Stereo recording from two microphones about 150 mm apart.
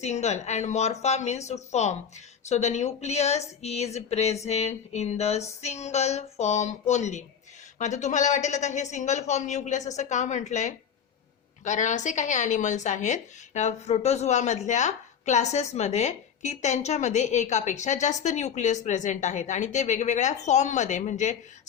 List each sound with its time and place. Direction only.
0.0 s a woman's voice: 50° left (ahead or behind)